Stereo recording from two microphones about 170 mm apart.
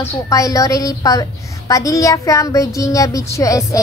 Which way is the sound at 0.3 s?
20° left (ahead or behind).